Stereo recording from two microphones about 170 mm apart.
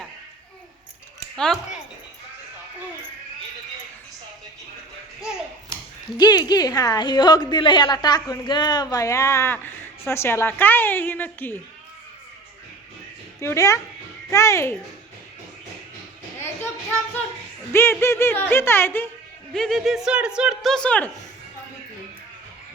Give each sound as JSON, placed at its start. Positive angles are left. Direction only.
{"t": 6.1, "sound": "a woman's voice", "side_deg": 25}
{"t": 13.4, "sound": "speech", "side_deg": 15}
{"t": 17.7, "sound": "speech", "side_deg": 15}
{"t": 19.5, "sound": "speech", "side_deg": 0}